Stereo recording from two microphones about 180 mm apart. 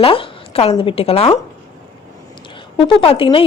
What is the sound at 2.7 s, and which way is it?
Speech, 30° left (ahead or behind).